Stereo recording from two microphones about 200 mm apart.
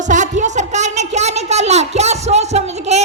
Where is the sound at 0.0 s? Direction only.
35° right (ahead or behind).